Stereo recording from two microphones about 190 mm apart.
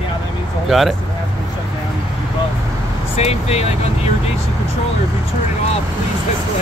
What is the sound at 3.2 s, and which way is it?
Speech, 35° left (ahead or behind).